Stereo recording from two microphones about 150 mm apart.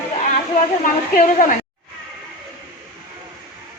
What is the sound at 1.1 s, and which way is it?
Speech, 60° left (ahead or behind).